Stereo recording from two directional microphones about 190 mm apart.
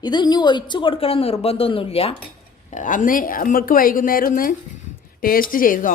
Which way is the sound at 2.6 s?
40° left (ahead or behind).